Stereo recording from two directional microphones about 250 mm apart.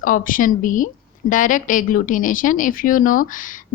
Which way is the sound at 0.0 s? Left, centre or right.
Left.